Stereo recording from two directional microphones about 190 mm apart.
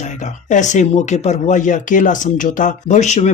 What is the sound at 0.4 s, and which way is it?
Speech, 40° left (ahead or behind).